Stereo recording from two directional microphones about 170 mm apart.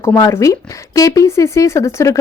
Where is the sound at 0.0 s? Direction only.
20° left (ahead or behind).